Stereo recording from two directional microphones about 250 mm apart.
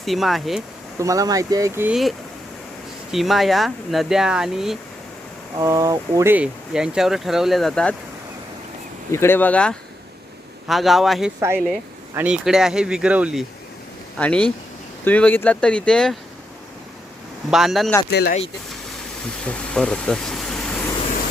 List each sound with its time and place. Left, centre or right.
0.0 s speech: centre
0.9 s speech: centre
5.5 s speech: centre
9.1 s speech: centre
11.3 s speech: centre
17.5 s speech: centre
18.1 s speech: left
19.5 s speech: centre